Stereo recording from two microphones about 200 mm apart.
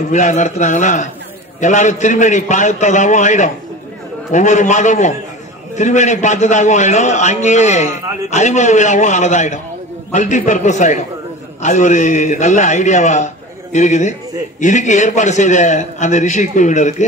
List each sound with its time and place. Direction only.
0.1 s a man's voice: 35° left (ahead or behind)